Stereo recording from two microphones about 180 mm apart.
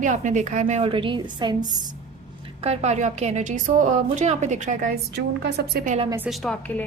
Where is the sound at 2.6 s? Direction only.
35° right (ahead or behind).